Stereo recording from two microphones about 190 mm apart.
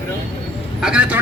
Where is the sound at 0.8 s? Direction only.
5° right (ahead or behind).